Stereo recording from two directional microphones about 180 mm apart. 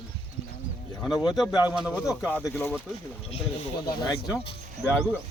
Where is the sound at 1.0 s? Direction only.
5° left (ahead or behind).